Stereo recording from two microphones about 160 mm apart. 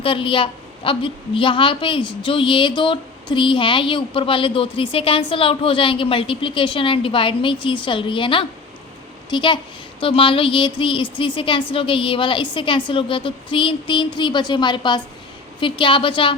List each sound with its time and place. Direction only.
0.0 s a woman's voice: 35° left (ahead or behind)